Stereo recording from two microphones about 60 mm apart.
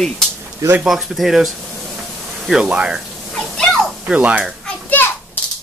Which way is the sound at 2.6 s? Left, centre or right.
Centre.